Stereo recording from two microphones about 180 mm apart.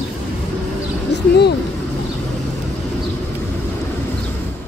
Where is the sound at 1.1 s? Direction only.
65° left (ahead or behind).